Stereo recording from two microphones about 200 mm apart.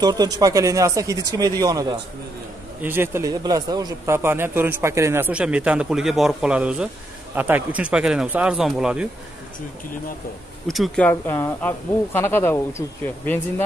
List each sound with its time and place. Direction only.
0.0 s speech: 20° right (ahead or behind); by 9.1 s 5° right (ahead or behind)
10.7 s speech: 5° left (ahead or behind)